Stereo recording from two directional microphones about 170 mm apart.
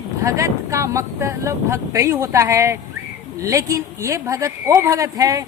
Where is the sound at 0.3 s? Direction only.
20° right (ahead or behind).